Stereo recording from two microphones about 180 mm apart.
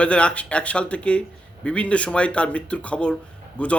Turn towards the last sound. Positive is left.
turn(degrees=5)  # may be behind; listen again after turning